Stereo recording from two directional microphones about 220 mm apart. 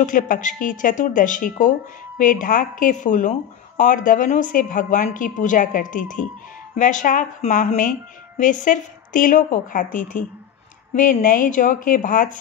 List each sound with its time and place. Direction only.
0.0 s speech: 35° left (ahead or behind)